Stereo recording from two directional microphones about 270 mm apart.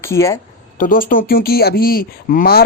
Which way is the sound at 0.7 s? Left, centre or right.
Left.